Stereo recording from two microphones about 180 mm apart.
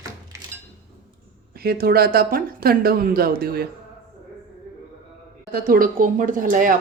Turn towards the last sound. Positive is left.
turn(degrees=-50)  # may be behind; listen again after turning